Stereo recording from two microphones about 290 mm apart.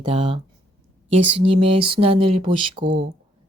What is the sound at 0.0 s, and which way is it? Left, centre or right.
Speech, centre.